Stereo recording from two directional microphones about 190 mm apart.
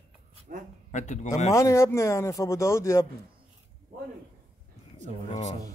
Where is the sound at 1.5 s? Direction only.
15° left (ahead or behind).